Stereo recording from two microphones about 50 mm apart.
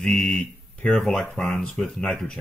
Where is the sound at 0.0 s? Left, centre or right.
Centre.